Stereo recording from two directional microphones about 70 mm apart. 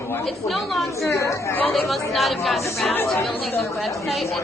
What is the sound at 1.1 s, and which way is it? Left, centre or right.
Speech, left.